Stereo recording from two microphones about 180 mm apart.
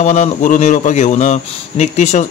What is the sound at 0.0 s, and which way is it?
A man's voice, 40° left (ahead or behind).